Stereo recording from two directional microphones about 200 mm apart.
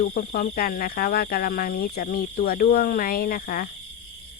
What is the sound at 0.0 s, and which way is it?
Speech, 50° left (ahead or behind).